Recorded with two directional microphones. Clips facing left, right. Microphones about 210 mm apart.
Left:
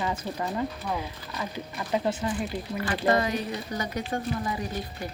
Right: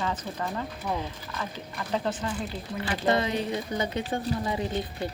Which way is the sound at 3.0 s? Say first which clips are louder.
Even; 25° right (ahead or behind).